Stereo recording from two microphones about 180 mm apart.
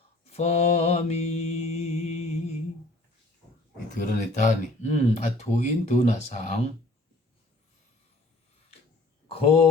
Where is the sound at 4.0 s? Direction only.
45° left (ahead or behind).